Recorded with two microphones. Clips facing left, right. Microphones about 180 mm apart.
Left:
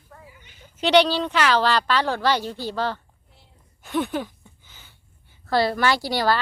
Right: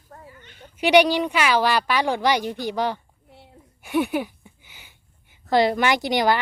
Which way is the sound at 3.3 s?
65° right (ahead or behind).